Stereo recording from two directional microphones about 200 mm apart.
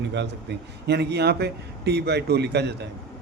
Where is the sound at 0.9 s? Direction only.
55° right (ahead or behind).